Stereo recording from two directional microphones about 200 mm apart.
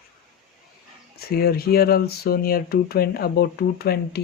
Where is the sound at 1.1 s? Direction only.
50° left (ahead or behind).